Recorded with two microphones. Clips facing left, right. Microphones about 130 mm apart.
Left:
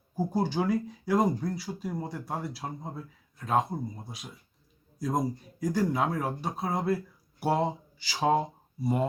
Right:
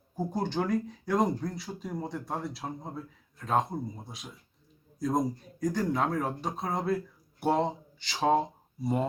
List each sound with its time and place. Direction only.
0.2 s speech: 5° left (ahead or behind)